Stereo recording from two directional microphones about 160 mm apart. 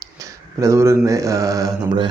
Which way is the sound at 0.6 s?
20° right (ahead or behind).